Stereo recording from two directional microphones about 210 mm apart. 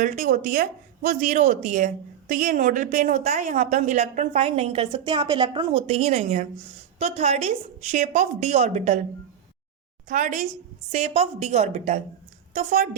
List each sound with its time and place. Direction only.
0.0 s speech: 40° right (ahead or behind)
10.1 s speech: 35° right (ahead or behind)